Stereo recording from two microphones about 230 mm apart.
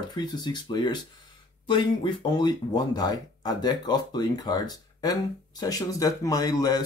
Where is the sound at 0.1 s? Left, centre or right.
Centre.